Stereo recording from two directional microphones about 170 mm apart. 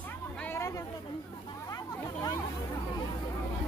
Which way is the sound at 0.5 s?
15° left (ahead or behind).